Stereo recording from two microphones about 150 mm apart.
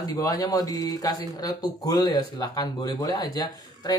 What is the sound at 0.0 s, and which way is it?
Speech, 25° left (ahead or behind).